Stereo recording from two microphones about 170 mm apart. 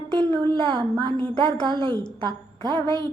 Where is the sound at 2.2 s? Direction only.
30° right (ahead or behind).